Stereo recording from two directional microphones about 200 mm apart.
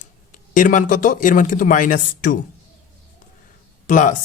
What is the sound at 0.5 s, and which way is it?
Speech, 40° left (ahead or behind).